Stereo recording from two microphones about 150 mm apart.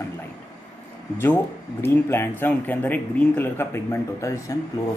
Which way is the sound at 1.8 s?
15° left (ahead or behind).